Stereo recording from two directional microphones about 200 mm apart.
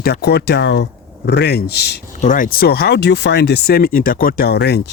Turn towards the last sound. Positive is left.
turn(degrees=55)  # may be behind; listen again after turning